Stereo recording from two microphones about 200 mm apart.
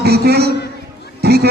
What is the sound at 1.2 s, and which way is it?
Music, 50° right (ahead or behind).